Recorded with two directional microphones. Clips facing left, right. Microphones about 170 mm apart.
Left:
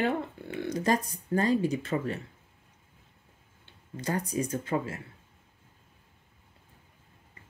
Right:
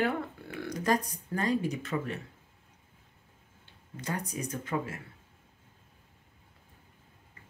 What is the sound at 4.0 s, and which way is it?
Speech, 30° left (ahead or behind).